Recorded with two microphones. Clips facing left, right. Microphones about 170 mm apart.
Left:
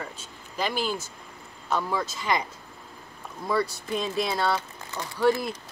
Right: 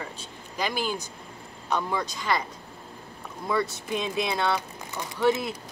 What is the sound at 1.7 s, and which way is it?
Speech, 5° left (ahead or behind).